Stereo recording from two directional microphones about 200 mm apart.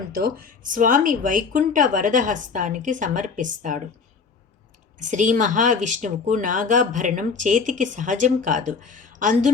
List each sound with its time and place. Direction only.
0.1 s speech: 50° right (ahead or behind)
4.9 s speech: 40° right (ahead or behind)